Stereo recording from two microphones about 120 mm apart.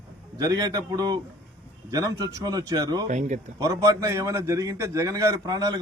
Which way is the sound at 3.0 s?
85° right.